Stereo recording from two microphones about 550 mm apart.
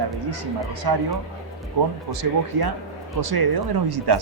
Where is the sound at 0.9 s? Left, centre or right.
Right.